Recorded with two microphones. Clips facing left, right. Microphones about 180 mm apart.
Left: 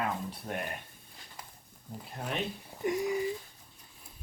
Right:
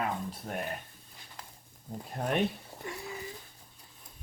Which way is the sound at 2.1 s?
45° right (ahead or behind).